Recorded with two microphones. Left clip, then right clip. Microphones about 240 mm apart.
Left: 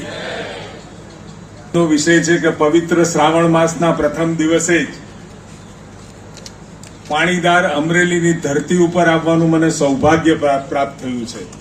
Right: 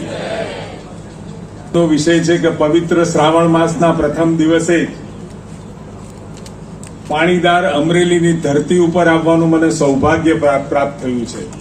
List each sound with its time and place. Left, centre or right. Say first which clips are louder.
1.7 s speech: right 1 dB; left
7.1 s speech: right 2 dB; left